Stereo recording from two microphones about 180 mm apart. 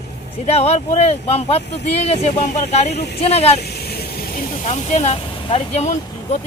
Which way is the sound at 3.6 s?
60° left (ahead or behind).